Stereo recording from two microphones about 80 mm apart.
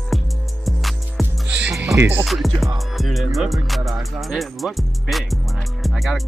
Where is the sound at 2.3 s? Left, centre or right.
Centre.